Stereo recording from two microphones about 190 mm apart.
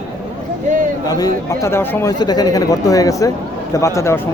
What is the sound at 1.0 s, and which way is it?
Speech, 20° left (ahead or behind).